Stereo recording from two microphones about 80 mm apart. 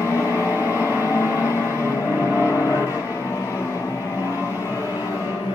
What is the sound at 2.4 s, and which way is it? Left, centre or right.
Vehicle, left.